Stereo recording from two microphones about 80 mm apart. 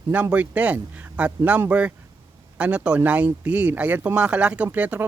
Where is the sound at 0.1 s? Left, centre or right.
Centre.